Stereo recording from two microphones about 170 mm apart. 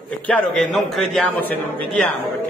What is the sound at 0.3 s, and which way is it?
A man's voice, centre (ahead or behind).